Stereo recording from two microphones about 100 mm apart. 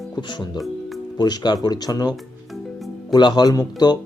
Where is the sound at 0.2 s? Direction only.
50° left (ahead or behind).